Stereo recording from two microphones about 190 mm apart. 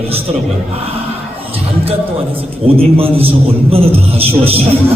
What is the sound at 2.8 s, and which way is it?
A man's voice, 30° right (ahead or behind).